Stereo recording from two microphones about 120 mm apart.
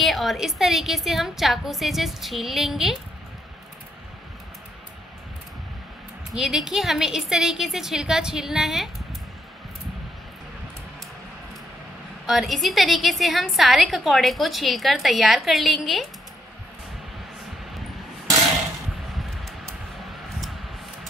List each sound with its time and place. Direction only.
0.0 s a woman's voice: centre (ahead or behind)
6.3 s a woman's voice: 5° right (ahead or behind)
12.3 s a woman's voice: centre (ahead or behind)